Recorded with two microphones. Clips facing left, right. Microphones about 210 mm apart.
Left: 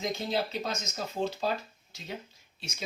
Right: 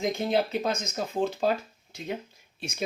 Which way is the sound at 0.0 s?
55° right (ahead or behind).